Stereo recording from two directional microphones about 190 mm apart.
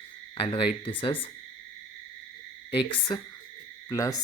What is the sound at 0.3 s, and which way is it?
Speech, 25° left (ahead or behind).